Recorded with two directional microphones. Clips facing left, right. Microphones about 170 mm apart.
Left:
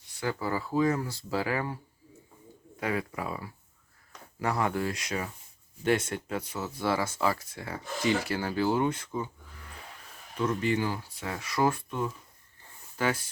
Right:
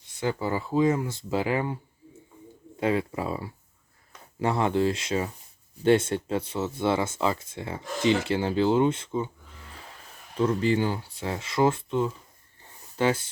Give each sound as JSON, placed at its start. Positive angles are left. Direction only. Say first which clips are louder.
{"t": 0.2, "sound": "speech", "louder": "right 3 dB", "side_deg": -20}
{"t": 2.8, "sound": "speech", "louder": "right 6 dB", "side_deg": -25}
{"t": 10.3, "sound": "speech", "louder": "right 4 dB", "side_deg": -30}